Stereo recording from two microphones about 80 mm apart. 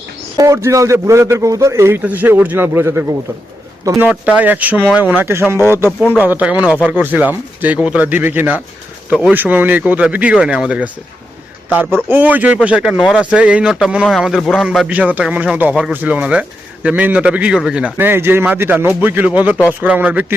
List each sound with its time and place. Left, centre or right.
0.3 s a man's voice: right
2.0 s speech: right
4.1 s a man's voice: centre
4.4 s a man's voice: centre
5.2 s a man's voice: right
12.0 s a man's voice: right; by 14.8 s centre
14.8 s a man's voice: centre
17.9 s speech: right